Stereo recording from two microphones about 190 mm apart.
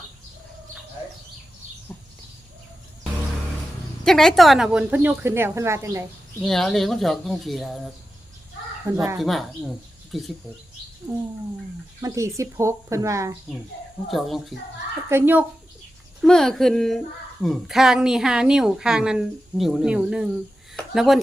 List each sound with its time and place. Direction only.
4.0 s a woman's voice: centre (ahead or behind); by 6.1 s 15° right (ahead or behind)
6.4 s a woman's voice: centre (ahead or behind)
8.9 s a woman's voice: 15° right (ahead or behind)
9.2 s a woman's voice: centre (ahead or behind)
11.1 s a woman's voice: 15° right (ahead or behind)
14.1 s a woman's voice: centre (ahead or behind)
15.1 s a woman's voice: 10° right (ahead or behind)
16.2 s a woman's voice: 5° left (ahead or behind)